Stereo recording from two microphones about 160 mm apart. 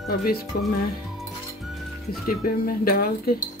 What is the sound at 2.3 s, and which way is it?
Speech, 65° left (ahead or behind).